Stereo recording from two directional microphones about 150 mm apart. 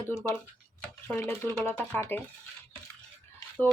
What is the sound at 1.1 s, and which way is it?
Speech, 15° left (ahead or behind).